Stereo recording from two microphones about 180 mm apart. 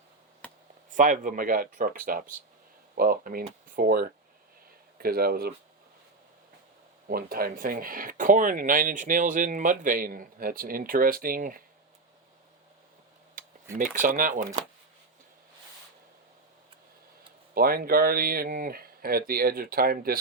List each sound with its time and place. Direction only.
0.4 s a sound: 10° left (ahead or behind)
0.9 s speech: 45° right (ahead or behind)
7.1 s speech: 55° right (ahead or behind)
13.7 s speech: 50° right (ahead or behind)
17.5 s speech: 55° right (ahead or behind)